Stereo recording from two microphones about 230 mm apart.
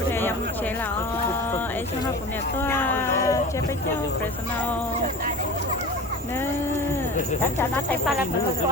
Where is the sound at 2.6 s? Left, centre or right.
Centre.